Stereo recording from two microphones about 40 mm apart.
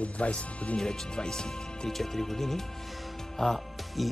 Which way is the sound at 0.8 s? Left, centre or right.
Centre.